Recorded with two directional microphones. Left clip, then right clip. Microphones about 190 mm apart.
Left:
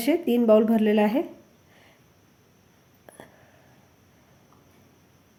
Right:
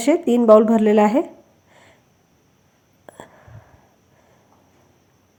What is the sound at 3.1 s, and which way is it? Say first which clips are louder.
Whispering: right 7 dB; 15° right (ahead or behind).